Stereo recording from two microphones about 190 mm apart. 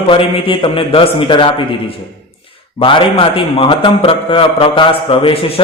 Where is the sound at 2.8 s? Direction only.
30° left (ahead or behind).